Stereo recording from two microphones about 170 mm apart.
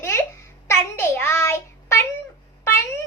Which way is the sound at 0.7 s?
15° left (ahead or behind).